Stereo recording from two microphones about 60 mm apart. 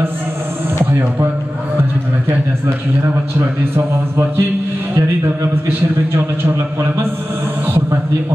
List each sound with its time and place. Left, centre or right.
3.3 s a man's voice: right